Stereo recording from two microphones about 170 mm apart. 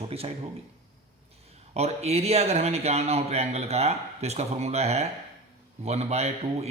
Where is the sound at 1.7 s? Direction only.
40° right (ahead or behind).